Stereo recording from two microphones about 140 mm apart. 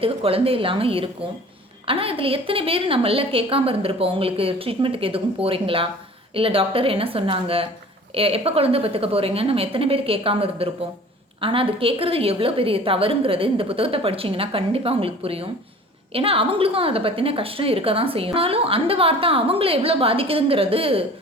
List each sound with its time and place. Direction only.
0.0 s a woman's voice: 40° right (ahead or behind)